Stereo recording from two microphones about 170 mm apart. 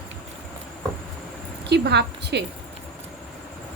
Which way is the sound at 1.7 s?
80° right.